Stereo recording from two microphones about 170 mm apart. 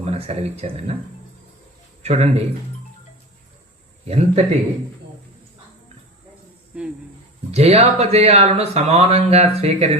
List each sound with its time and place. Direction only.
0.0 s speech: 40° right (ahead or behind)
2.0 s speech: 40° right (ahead or behind)
4.0 s speech: 40° right (ahead or behind)
6.7 s speech: 5° right (ahead or behind)
7.5 s speech: 35° right (ahead or behind)